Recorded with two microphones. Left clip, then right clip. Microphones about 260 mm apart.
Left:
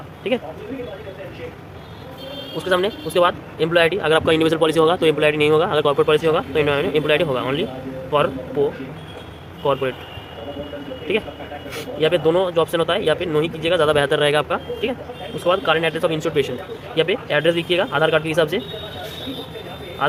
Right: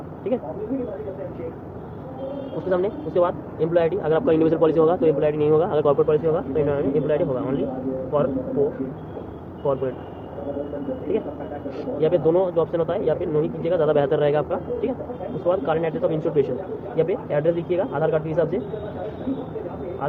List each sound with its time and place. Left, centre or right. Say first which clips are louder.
2.6 s speech: left 4 dB; left
11.9 s speech: left 2 dB; left